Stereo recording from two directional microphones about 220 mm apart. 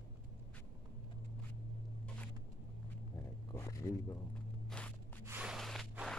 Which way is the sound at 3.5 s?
15° left (ahead or behind).